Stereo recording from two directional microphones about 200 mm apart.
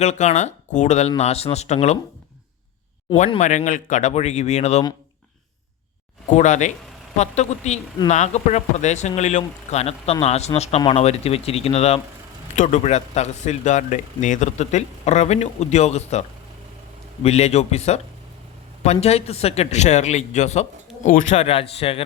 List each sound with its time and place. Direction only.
0.0 s speech: 35° left (ahead or behind)
3.2 s speech: 35° left (ahead or behind)
6.2 s speech: 40° left (ahead or behind)
17.2 s speech: 35° left (ahead or behind)